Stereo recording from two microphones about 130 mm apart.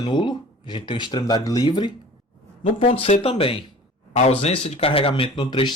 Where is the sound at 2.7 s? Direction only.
45° left (ahead or behind).